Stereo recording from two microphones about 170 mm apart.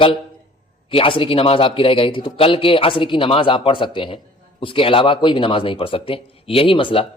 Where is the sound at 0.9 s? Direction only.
30° left (ahead or behind).